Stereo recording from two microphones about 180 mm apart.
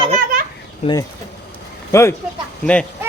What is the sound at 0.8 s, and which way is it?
Speech, 35° left (ahead or behind).